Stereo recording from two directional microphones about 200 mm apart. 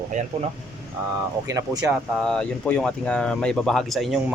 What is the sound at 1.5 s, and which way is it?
Speech, 15° right (ahead or behind).